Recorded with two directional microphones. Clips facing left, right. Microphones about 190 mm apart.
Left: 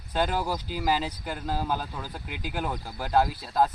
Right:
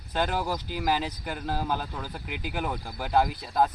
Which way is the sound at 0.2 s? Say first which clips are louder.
Left 1 dB; 10° left (ahead or behind).